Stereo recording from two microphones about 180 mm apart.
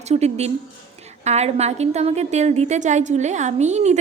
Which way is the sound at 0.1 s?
35° right (ahead or behind).